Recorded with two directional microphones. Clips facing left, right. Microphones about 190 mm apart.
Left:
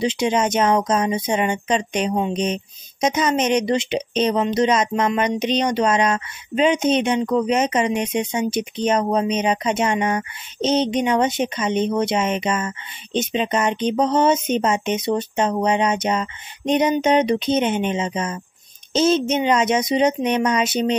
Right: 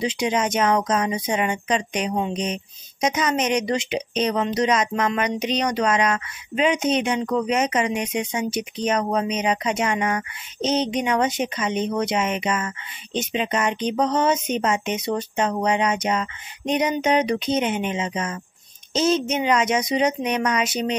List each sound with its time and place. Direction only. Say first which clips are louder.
0.0 s speech: left 3 dB; 25° left (ahead or behind)